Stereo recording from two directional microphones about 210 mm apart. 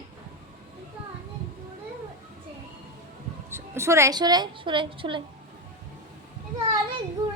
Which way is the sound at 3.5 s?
10° right (ahead or behind).